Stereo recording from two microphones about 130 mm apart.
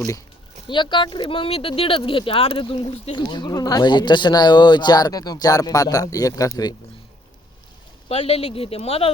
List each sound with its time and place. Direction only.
0.7 s speech: 35° left (ahead or behind)
8.0 s speech: 45° left (ahead or behind)